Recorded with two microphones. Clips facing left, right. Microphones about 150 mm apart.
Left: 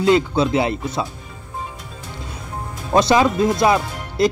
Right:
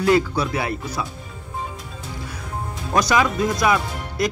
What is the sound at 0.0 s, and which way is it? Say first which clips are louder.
Speech: left 2 dB; 25° left (ahead or behind).